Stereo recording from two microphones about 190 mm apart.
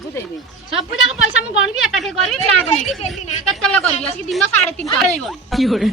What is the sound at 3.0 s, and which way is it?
Speech, 35° left (ahead or behind).